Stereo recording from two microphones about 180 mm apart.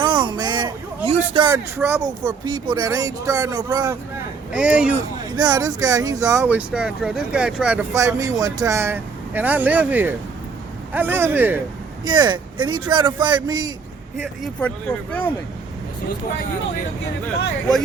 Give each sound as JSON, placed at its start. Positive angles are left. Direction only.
{"t": 0.0, "sound": "a sound", "side_deg": -25}
{"t": 1.5, "sound": "speech", "side_deg": -10}
{"t": 4.5, "sound": "speech", "side_deg": -5}
{"t": 5.4, "sound": "speech", "side_deg": -20}
{"t": 12.0, "sound": "speech", "side_deg": -25}
{"t": 14.4, "sound": "speech", "side_deg": 10}